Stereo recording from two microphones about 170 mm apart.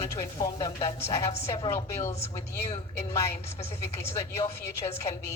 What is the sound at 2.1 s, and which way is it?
Speech, 40° left (ahead or behind).